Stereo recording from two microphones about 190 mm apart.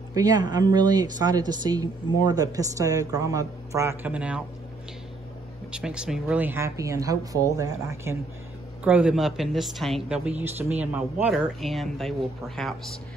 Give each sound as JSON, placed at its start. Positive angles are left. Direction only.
{"t": 0.1, "sound": "speech", "side_deg": -20}
{"t": 5.7, "sound": "a woman's voice", "side_deg": -5}